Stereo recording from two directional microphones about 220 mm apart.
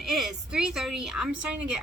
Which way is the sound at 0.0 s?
Centre (ahead or behind).